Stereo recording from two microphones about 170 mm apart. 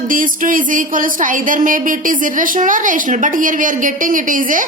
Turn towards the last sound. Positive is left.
turn(degrees=-50)  # may be behind; listen again after turning